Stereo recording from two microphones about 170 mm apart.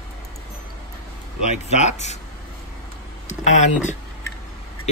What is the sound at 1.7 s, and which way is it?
Speech, 40° left (ahead or behind).